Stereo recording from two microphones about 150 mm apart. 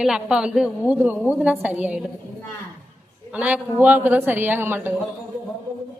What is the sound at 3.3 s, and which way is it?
A woman's voice, 10° right (ahead or behind).